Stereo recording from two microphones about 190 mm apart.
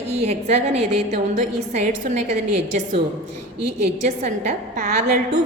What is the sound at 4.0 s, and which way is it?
Speech, 40° right (ahead or behind).